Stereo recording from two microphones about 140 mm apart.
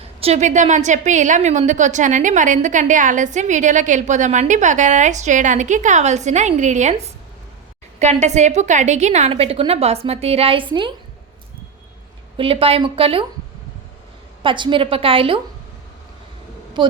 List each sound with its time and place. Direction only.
0.2 s a woman's voice: 50° right (ahead or behind)
7.9 s a woman's voice: 50° right (ahead or behind); by 10.9 s 35° right (ahead or behind)
12.4 s a woman's voice: 40° right (ahead or behind)
14.4 s a woman's voice: 35° right (ahead or behind)
16.8 s speech: 35° right (ahead or behind)